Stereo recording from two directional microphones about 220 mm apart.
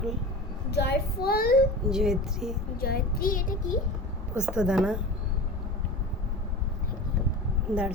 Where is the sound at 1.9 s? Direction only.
Centre (ahead or behind).